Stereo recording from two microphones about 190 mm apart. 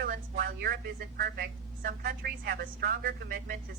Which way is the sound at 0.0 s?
50° right (ahead or behind).